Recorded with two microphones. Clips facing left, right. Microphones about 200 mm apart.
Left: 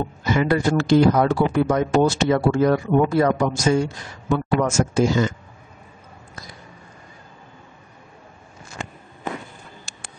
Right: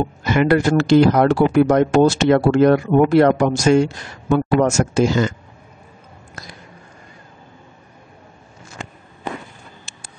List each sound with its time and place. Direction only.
0.2 s speech: 70° right (ahead or behind)